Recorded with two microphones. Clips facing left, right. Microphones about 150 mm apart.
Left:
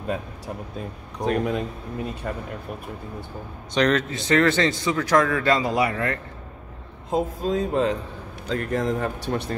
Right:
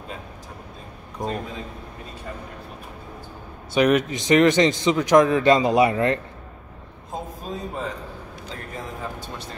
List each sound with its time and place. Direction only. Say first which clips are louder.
1.2 s speech: left 6 dB; 75° left (ahead or behind)
2.3 s speech: left 3 dB; 60° left (ahead or behind)
3.7 s a man's voice: right 2 dB; 10° right (ahead or behind)
7.1 s speech: left 9 dB; 90° left
8.5 s speech: left 12 dB; 75° left (ahead or behind)